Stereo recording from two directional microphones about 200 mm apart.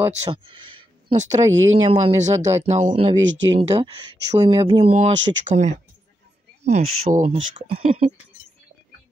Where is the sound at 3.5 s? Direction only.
25° right (ahead or behind).